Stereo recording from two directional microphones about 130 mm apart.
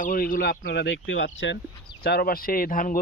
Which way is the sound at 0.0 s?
90° left.